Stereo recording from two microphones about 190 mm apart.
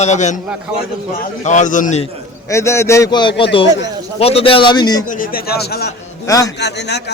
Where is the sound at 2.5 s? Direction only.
15° left (ahead or behind).